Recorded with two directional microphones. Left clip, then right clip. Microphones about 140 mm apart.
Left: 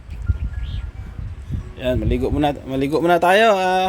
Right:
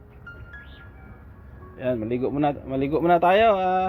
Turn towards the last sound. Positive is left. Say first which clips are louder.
# left 4 dB
turn(degrees=50)  # may be behind; listen again after turning